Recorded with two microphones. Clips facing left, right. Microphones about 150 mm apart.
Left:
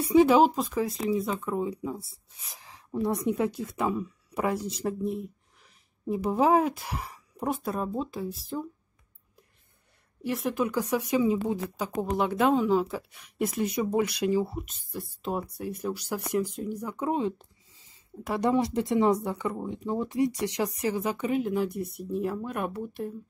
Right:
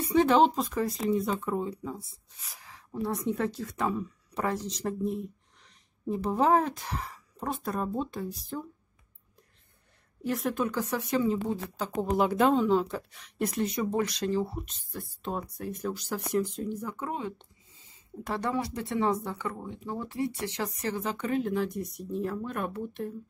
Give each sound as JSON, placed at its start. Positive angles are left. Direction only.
{"t": 0.0, "sound": "speech", "side_deg": 10}
{"t": 2.4, "sound": "speech", "side_deg": 20}
{"t": 10.2, "sound": "speech", "side_deg": 5}